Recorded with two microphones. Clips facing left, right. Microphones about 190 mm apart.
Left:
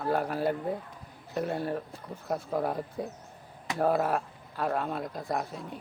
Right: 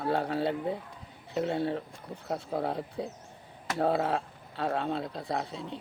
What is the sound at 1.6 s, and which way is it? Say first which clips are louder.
Speech: right 1 dB; 25° right (ahead or behind).